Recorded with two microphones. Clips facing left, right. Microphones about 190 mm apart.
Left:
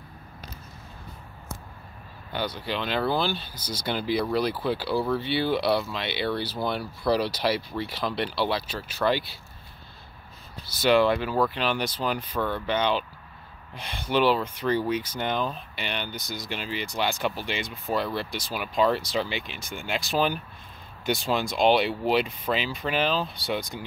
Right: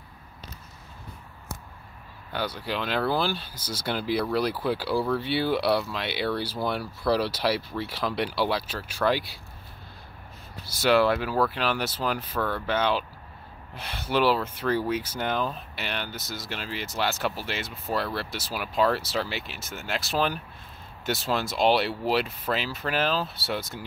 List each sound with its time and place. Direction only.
2.3 s speech: 5° right (ahead or behind)
10.6 s speech: 10° right (ahead or behind)